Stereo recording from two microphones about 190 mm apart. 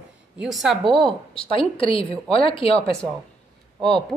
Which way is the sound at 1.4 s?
30° left (ahead or behind).